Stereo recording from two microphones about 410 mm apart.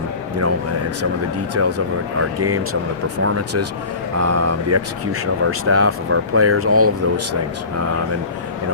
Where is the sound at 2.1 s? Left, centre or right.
Right.